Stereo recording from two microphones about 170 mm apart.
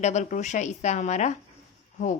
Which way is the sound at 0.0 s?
45° left (ahead or behind).